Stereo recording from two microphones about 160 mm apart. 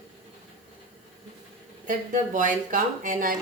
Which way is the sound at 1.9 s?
55° right (ahead or behind).